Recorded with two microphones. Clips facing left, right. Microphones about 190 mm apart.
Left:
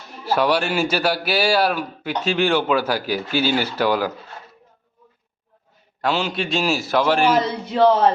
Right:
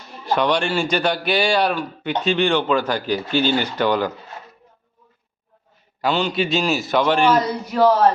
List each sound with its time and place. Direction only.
0.3 s a man's voice: 5° left (ahead or behind)
6.0 s a man's voice: centre (ahead or behind)
7.3 s a man's voice: 25° left (ahead or behind)